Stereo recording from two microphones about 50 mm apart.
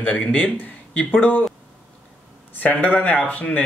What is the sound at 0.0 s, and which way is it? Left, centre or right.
Speech, left.